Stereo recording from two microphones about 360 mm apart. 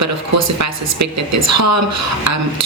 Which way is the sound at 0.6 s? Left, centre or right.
Right.